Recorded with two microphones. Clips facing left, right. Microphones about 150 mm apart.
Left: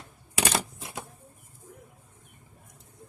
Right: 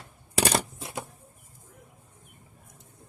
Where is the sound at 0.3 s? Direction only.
30° right (ahead or behind).